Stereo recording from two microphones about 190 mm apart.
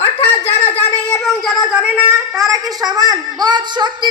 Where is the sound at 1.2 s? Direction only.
Centre (ahead or behind).